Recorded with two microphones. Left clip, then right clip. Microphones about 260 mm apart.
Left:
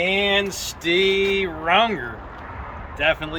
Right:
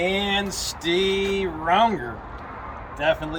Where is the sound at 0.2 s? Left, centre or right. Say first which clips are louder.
Left 4 dB; centre.